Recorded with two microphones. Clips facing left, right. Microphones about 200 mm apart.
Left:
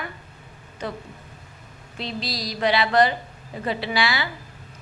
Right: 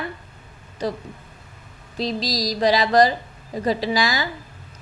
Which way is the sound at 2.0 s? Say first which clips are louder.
Right 6 dB; 40° right (ahead or behind).